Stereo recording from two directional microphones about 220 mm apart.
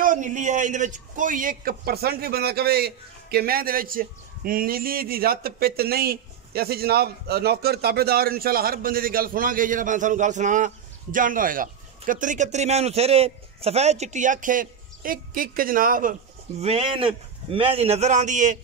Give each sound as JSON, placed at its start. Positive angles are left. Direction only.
{"t": 0.0, "sound": "speech", "side_deg": -35}